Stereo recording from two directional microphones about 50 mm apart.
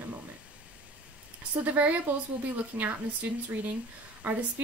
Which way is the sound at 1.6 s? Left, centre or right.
Right.